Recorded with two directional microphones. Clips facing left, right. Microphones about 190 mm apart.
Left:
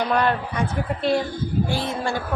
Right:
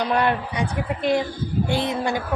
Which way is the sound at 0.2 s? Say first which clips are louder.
Even; 15° right (ahead or behind).